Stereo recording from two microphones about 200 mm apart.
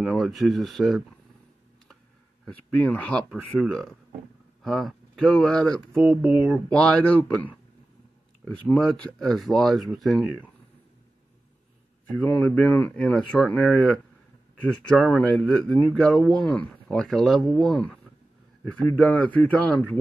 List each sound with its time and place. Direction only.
0.0 s speech: centre (ahead or behind)
2.4 s speech: 10° left (ahead or behind)
4.6 s speech: centre (ahead or behind)
8.6 s speech: centre (ahead or behind)
12.2 s speech: 10° left (ahead or behind)